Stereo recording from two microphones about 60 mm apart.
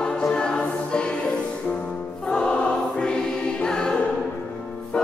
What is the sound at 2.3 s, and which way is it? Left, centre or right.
Choir, centre.